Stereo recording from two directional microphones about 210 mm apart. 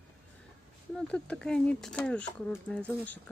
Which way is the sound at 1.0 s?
5° left (ahead or behind).